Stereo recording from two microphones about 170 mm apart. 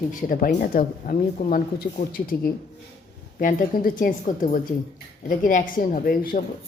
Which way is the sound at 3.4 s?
55° left (ahead or behind).